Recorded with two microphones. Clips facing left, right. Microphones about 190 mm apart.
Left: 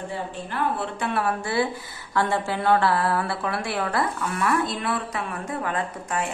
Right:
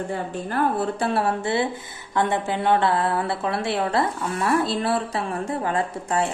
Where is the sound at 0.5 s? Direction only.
40° right (ahead or behind).